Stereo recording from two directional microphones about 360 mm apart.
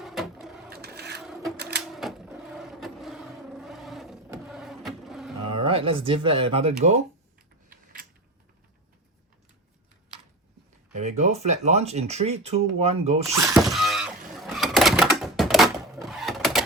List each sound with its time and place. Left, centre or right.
0.0 s sewing machine: centre
0.7 s a sound: right
1.2 s sewing machine: centre
2.0 s vehicle: centre
5.5 s speech: centre
10.9 s speech: centre
13.5 s a sound: centre